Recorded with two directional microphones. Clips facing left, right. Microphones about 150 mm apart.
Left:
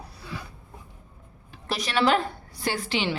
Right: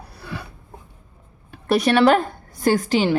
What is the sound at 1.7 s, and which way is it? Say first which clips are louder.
Speech: right 8 dB; 60° right (ahead or behind).